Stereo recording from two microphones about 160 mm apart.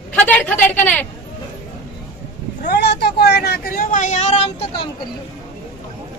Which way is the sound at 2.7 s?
90° left.